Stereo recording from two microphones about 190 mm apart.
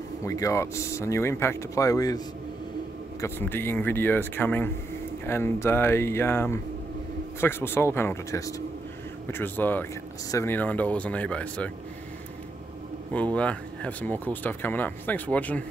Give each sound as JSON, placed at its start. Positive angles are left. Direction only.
{"t": 0.2, "sound": "speech", "side_deg": 15}
{"t": 13.1, "sound": "speech", "side_deg": 5}